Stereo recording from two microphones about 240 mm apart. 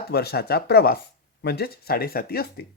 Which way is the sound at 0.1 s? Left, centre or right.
Left.